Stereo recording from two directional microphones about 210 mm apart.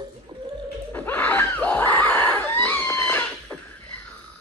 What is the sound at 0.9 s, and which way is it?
Screaming, 10° left (ahead or behind).